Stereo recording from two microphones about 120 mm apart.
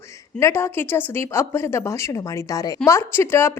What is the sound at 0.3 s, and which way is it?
A woman's voice, 25° left (ahead or behind).